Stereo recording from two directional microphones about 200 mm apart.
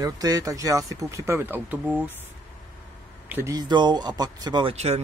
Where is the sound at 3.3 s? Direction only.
15° right (ahead or behind); by 5.0 s 30° right (ahead or behind).